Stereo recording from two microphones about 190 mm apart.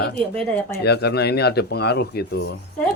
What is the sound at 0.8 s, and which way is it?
Speech, 60° left (ahead or behind).